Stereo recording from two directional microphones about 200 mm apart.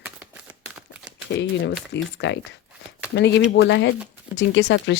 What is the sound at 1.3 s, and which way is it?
Speech, 60° left (ahead or behind).